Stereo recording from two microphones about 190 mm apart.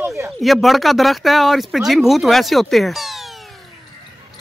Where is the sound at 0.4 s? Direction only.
Centre (ahead or behind).